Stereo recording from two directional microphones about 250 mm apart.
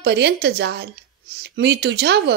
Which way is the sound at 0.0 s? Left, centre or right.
Right.